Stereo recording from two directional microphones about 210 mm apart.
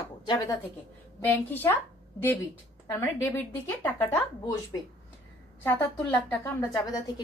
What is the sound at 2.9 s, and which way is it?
A woman's voice, 10° left (ahead or behind).